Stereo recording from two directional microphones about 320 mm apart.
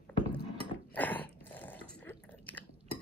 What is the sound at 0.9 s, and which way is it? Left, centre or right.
Biting, centre.